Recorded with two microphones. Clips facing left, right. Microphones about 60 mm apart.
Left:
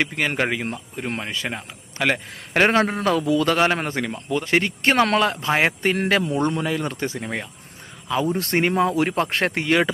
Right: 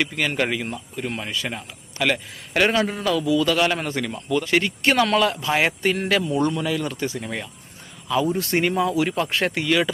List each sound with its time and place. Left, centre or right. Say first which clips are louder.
0.0 s a man's voice: left 1 dB; left
1.0 s a man's voice: left 1 dB; left